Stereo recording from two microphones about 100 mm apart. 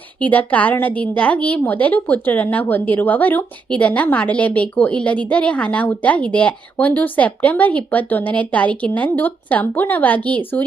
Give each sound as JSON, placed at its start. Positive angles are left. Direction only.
{"t": 0.2, "sound": "a woman's voice", "side_deg": 15}